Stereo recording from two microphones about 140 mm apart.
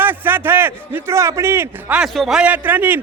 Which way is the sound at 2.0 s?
5° right (ahead or behind).